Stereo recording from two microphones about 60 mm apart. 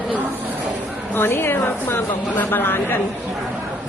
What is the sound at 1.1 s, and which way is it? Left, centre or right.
A woman's voice, left.